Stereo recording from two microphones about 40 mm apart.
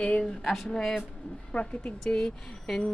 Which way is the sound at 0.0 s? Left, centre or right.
Left.